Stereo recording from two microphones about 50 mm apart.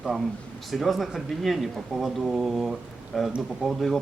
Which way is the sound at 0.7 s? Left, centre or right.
Centre.